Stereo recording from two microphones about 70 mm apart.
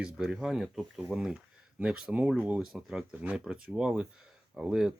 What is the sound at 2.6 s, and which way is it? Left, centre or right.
Speech, centre.